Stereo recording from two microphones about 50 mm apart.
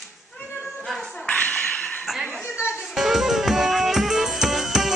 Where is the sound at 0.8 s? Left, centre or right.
Centre.